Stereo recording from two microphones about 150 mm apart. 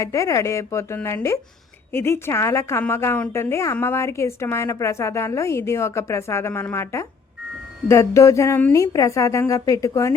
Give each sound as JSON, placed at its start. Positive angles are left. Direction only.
{"t": 0.0, "sound": "a woman's voice", "side_deg": 20}